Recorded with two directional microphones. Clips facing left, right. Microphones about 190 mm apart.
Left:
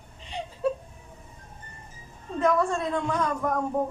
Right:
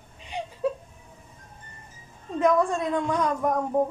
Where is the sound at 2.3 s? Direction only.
15° right (ahead or behind).